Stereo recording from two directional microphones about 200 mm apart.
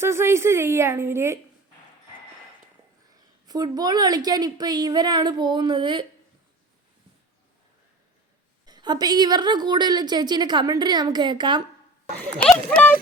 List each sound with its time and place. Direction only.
0.0 s a woman's voice: 10° right (ahead or behind)
3.4 s a woman's voice: 20° right (ahead or behind)
8.6 s a woman's voice: 20° right (ahead or behind)
12.5 s speech: 5° left (ahead or behind)